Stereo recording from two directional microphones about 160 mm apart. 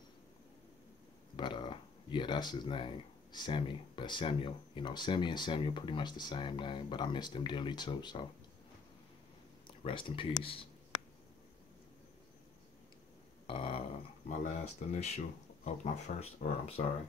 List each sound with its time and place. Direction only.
1.3 s speech: 30° left (ahead or behind)
9.7 s speech: 30° left (ahead or behind)
13.5 s dog: 35° left (ahead or behind)
14.3 s speech: 45° left (ahead or behind)